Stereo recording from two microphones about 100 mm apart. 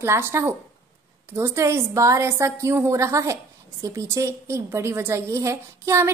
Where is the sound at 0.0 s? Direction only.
25° right (ahead or behind).